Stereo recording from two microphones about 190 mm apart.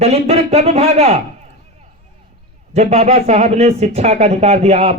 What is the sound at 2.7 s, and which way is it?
Speech, 35° right (ahead or behind).